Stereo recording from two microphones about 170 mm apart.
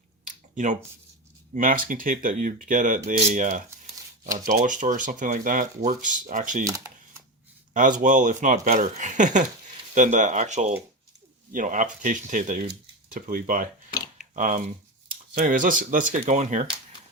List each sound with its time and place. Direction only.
0.3 s a sound: 45° right (ahead or behind)
1.5 s speech: 50° right (ahead or behind)
6.7 s typewriter: 20° right (ahead or behind)
7.7 s speech: 50° right (ahead or behind)